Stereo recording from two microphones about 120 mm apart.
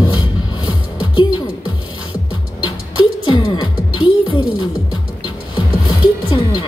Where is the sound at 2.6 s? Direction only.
45° left (ahead or behind).